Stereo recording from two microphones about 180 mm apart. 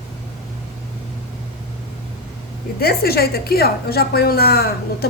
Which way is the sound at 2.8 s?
60° left (ahead or behind).